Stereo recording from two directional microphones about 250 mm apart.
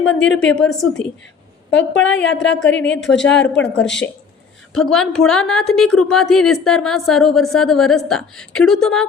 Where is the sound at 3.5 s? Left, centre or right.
Centre.